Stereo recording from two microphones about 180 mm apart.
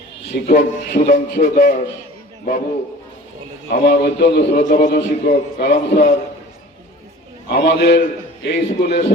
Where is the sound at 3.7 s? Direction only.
60° left (ahead or behind).